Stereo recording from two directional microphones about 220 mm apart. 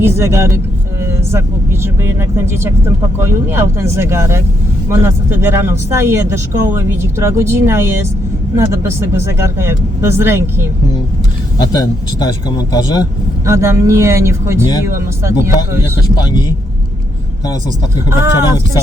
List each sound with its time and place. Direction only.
0.0 s speech: 10° right (ahead or behind)
11.7 s a man's voice: 20° left (ahead or behind)
13.4 s speech: 15° right (ahead or behind)